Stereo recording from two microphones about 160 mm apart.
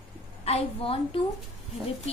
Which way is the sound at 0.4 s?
35° left (ahead or behind).